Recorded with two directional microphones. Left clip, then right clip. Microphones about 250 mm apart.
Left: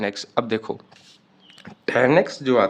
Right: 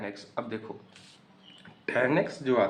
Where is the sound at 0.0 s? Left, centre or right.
Left.